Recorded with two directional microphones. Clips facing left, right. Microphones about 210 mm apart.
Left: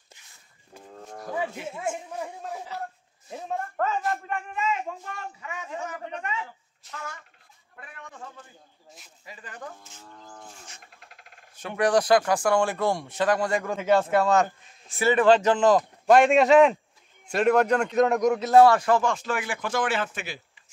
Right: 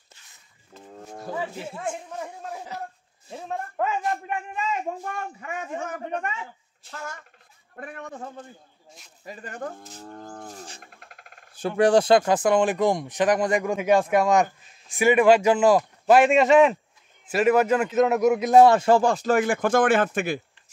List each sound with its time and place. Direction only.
1.8 s a man's voice: centre (ahead or behind)
3.7 s speech: 10° right (ahead or behind)
5.0 s a woman's voice: 50° right (ahead or behind)
6.8 s a man's voice: 30° right (ahead or behind)
7.7 s a woman's voice: 45° right (ahead or behind)
9.8 s speech: 35° right (ahead or behind)
10.1 s a man's voice: 50° right (ahead or behind)